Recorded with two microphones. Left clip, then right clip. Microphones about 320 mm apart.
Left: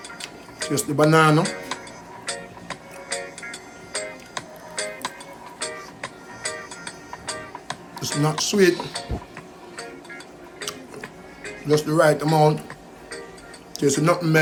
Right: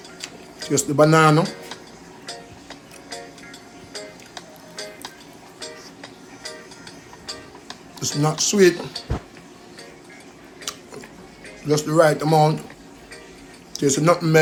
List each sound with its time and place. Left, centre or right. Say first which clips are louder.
0.2 s tick-tock: left 1 dB; centre
2.2 s music: left 5 dB; centre
11.7 s speech: right 1 dB; centre
13.7 s speech: right 2 dB; centre